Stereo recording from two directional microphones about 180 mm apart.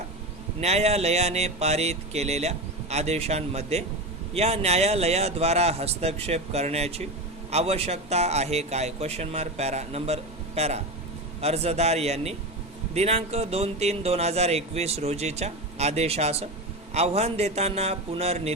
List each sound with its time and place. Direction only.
0.6 s speech: 35° right (ahead or behind)